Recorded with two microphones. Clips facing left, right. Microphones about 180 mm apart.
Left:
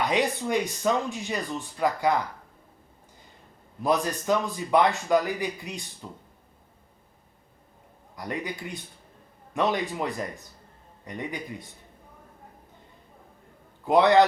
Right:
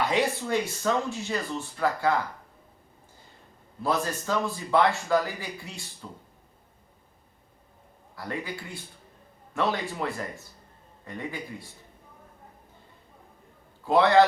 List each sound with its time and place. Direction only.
0.0 s speech: 15° left (ahead or behind)
3.8 s speech: 15° left (ahead or behind)
8.1 s a man's voice: 15° left (ahead or behind)
13.8 s speech: 20° left (ahead or behind)